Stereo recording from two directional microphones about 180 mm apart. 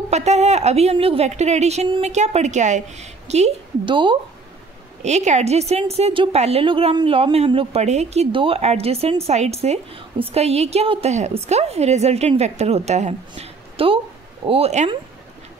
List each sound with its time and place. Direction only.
0.1 s a woman's voice: 40° right (ahead or behind)
5.0 s a woman's voice: 40° right (ahead or behind)
13.3 s a sound: 30° right (ahead or behind)
14.4 s a woman's voice: 35° right (ahead or behind)